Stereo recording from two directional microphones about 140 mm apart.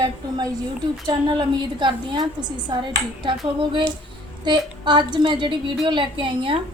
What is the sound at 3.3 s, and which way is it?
A woman's voice, 35° right (ahead or behind).